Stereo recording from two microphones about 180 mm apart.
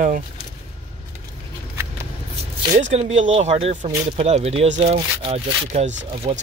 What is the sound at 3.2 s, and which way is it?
Speech, 35° right (ahead or behind).